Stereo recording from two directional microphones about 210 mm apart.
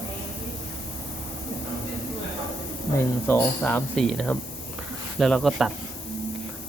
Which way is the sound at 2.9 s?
10° left (ahead or behind).